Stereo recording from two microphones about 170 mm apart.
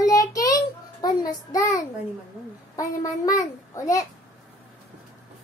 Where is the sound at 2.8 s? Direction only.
20° left (ahead or behind).